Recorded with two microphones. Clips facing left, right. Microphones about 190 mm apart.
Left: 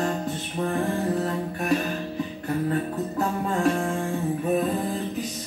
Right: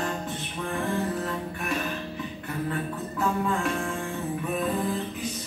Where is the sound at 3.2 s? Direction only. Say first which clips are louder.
Left 2 dB; 40° left (ahead or behind).